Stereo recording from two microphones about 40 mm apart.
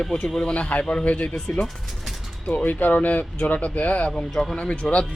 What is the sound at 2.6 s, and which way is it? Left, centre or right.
Speech, left.